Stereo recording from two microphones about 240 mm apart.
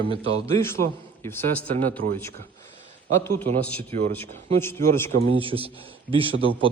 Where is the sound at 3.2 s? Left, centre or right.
Centre.